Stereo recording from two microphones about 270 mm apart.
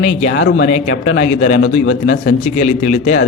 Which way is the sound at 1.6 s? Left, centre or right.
Left.